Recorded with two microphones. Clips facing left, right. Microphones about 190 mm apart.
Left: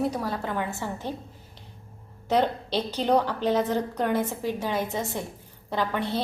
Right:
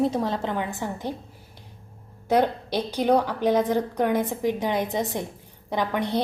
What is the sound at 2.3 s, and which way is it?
A woman's voice, 10° right (ahead or behind).